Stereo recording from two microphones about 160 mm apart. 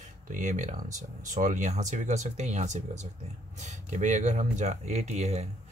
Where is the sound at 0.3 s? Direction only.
50° right (ahead or behind).